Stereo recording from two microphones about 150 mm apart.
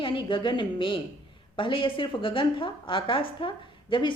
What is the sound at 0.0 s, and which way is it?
A woman's voice, 35° left (ahead or behind).